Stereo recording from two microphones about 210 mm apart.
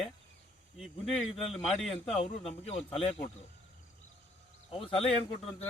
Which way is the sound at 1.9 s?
25° left (ahead or behind).